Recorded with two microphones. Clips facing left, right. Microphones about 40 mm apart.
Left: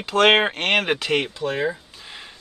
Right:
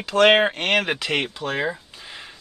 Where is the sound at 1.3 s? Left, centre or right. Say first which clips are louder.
Left 1 dB; right.